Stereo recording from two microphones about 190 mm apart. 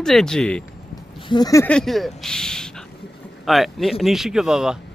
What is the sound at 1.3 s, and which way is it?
Speech, 20° left (ahead or behind).